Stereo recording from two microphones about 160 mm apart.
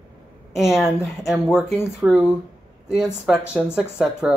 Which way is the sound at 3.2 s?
5° right (ahead or behind).